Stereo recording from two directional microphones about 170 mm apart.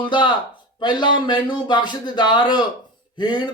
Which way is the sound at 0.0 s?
25° left (ahead or behind).